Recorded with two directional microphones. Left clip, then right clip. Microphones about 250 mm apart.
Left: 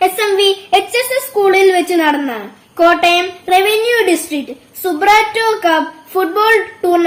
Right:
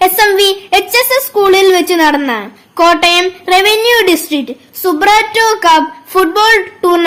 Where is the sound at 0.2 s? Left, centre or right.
Right.